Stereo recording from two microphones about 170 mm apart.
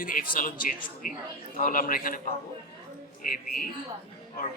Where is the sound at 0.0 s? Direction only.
55° left (ahead or behind).